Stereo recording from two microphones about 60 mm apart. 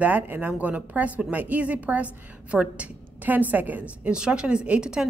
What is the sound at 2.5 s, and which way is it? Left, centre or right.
Speech, centre.